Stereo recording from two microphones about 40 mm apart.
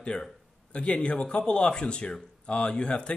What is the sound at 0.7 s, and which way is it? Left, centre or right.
Speech, left.